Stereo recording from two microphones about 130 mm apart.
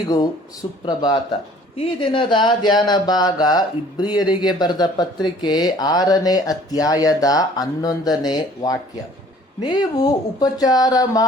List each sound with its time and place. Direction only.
0.9 s a man's voice: 35° left (ahead or behind)